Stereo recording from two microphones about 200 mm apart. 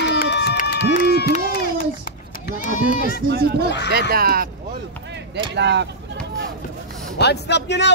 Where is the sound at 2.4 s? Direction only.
45° left (ahead or behind).